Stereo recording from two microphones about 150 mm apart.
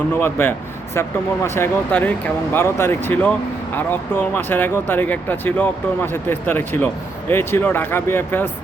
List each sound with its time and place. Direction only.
0.1 s speech: 15° left (ahead or behind)